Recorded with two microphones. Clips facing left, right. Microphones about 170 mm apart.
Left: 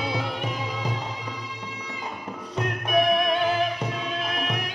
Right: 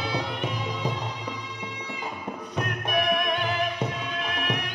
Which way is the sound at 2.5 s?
30° left (ahead or behind).